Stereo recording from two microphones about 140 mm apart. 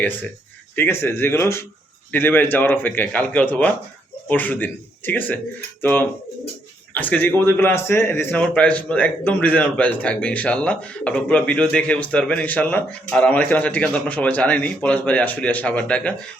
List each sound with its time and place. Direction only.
0.8 s a man's voice: 15° left (ahead or behind)